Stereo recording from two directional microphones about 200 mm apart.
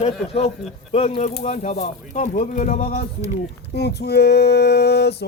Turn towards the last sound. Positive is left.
turn(degrees=55)  # may be behind; listen again after turning